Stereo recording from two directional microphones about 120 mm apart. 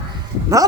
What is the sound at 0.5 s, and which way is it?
Speech, 25° right (ahead or behind).